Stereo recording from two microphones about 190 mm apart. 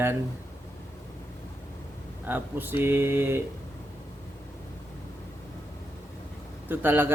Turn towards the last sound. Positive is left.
turn(degrees=-10)  # may be behind; listen again after turning